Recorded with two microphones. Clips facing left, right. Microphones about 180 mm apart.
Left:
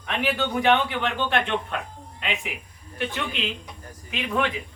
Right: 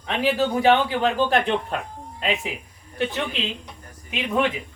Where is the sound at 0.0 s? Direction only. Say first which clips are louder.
Right 4 dB; 35° right (ahead or behind).